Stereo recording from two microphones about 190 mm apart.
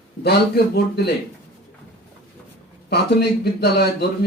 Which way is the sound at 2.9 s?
60° left (ahead or behind).